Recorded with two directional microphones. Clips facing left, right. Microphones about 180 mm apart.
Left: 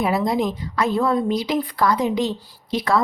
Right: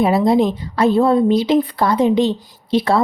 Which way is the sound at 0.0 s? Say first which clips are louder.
Right 6 dB; 25° right (ahead or behind).